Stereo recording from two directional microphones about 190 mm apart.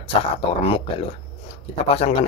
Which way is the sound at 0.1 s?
30° left (ahead or behind).